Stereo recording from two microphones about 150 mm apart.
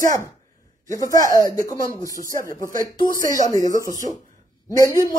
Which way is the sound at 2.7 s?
60° right (ahead or behind).